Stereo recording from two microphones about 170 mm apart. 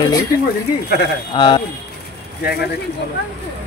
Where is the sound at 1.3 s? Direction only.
25° left (ahead or behind).